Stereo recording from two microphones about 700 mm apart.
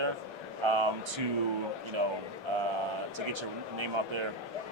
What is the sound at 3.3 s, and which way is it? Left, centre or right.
Speech, right.